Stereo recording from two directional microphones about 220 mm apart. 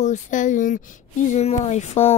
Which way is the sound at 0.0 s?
35° left (ahead or behind).